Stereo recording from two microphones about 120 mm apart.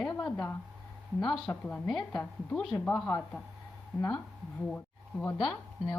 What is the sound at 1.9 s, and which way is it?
A woman's voice, 5° left (ahead or behind).